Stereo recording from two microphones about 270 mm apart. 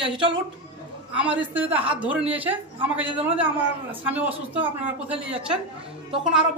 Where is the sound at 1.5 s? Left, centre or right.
Centre.